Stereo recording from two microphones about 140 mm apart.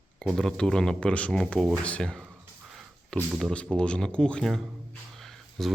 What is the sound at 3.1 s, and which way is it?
Speech, 5° left (ahead or behind).